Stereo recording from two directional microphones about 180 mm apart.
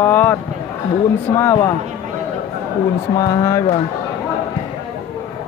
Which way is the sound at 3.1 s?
20° left (ahead or behind).